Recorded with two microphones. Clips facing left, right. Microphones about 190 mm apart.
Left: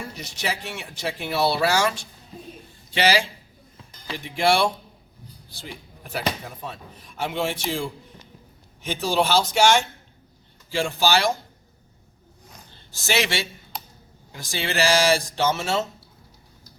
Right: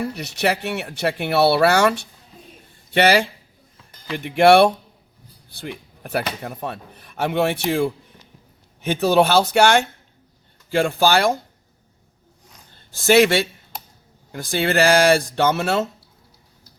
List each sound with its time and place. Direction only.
0.0 s speech: 65° right (ahead or behind)
13.0 s speech: 55° right (ahead or behind)